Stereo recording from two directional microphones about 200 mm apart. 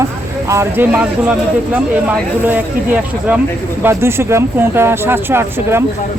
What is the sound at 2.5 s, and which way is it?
Speech, 5° right (ahead or behind).